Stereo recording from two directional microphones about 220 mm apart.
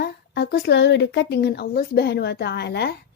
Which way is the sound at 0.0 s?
50° left (ahead or behind).